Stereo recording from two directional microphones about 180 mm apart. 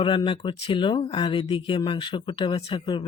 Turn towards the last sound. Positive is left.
turn(degrees=25)  # may be behind; listen again after turning